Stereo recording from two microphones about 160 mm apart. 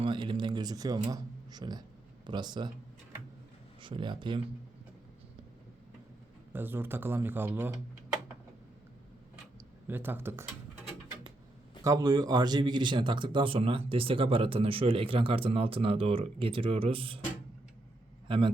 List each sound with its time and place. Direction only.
0.0 s speech: 30° right (ahead or behind)
3.8 s speech: 30° right (ahead or behind)
6.5 s speech: 15° right (ahead or behind)
9.8 s speech: 10° right (ahead or behind)
11.8 s speech: 20° right (ahead or behind)
18.3 s a man's voice: 30° right (ahead or behind)